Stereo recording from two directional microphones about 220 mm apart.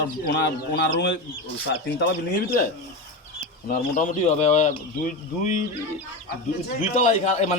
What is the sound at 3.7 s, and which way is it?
Speech, 35° left (ahead or behind).